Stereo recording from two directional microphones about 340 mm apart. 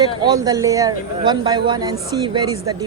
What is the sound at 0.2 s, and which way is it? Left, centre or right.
Speech, centre.